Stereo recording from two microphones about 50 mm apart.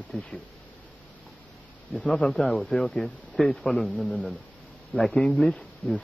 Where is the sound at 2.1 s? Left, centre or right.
Centre.